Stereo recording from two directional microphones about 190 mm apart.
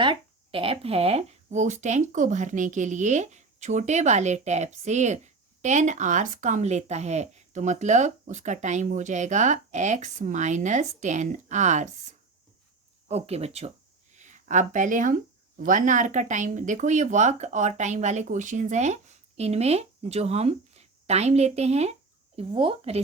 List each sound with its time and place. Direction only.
0.0 s speech: 25° right (ahead or behind)
13.1 s speech: 35° right (ahead or behind)
14.1 s a sound: 40° right (ahead or behind)
15.5 s speech: 45° right (ahead or behind)